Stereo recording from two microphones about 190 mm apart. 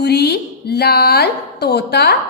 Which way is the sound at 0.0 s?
60° left (ahead or behind).